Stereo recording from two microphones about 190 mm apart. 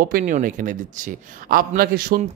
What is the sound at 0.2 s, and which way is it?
A man's voice, 45° right (ahead or behind).